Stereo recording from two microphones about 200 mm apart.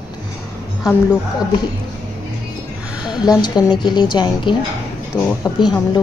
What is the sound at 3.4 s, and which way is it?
A woman's voice, 20° left (ahead or behind).